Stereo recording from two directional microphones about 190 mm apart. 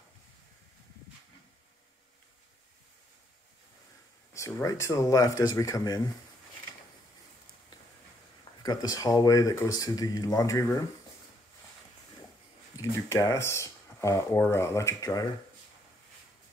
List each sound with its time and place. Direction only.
4.3 s speech: 15° left (ahead or behind)
8.6 s speech: 20° left (ahead or behind)
12.7 s speech: 15° left (ahead or behind)